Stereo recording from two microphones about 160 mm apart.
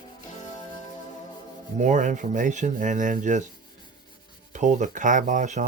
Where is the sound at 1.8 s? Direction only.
50° right (ahead or behind).